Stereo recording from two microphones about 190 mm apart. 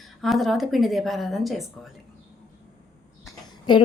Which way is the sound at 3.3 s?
25° left (ahead or behind).